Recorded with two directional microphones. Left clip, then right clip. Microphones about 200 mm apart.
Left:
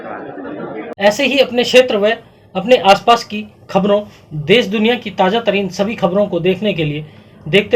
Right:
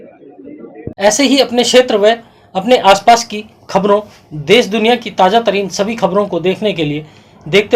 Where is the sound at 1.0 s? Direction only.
25° right (ahead or behind).